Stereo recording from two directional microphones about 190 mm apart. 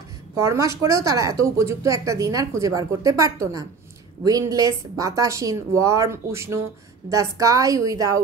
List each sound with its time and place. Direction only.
0.4 s a woman's voice: 15° right (ahead or behind)